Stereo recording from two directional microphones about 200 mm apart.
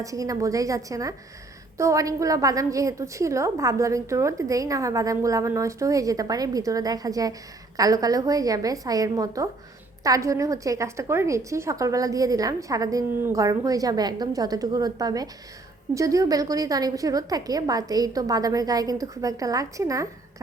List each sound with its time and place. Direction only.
0.0 s a woman's voice: 15° right (ahead or behind)